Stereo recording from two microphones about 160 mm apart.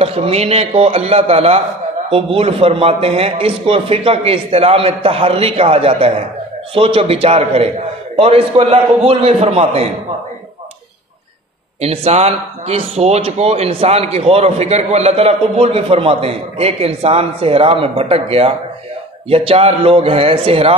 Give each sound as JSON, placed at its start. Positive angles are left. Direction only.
{"t": 0.0, "sound": "speech", "side_deg": -40}
{"t": 11.8, "sound": "speech", "side_deg": -40}